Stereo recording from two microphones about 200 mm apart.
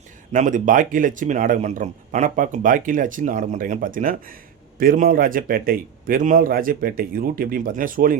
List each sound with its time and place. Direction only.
0.3 s a man's voice: 40° right (ahead or behind)